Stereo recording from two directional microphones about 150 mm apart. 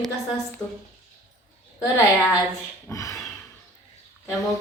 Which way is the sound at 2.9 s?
20° left (ahead or behind).